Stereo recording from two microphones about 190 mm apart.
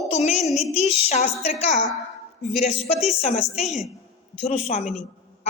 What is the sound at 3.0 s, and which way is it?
Speech, 30° left (ahead or behind).